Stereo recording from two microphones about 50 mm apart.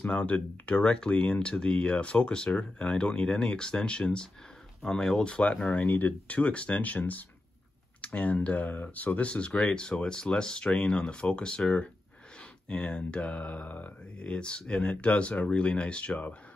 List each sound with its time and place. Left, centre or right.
0.0 s speech: left